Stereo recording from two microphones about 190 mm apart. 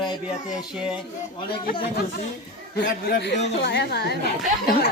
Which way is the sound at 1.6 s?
55° left (ahead or behind).